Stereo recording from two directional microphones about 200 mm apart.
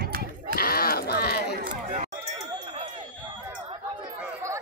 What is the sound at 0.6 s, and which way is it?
Sheep, 50° left (ahead or behind).